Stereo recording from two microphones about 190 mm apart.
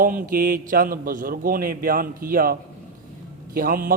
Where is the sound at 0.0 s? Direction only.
45° right (ahead or behind).